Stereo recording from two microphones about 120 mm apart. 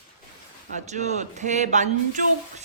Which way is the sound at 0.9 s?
75° right (ahead or behind).